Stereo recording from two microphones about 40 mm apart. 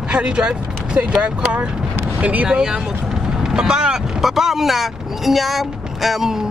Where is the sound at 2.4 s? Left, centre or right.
Centre.